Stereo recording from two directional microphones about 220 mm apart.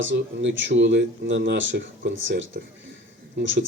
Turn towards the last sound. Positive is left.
turn(degrees=-60)  # may be behind; listen again after turning